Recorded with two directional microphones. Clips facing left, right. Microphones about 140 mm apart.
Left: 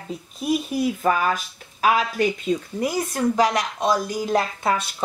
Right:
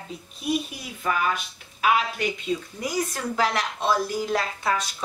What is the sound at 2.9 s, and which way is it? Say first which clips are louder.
Speech: left 3 dB; 30° left (ahead or behind).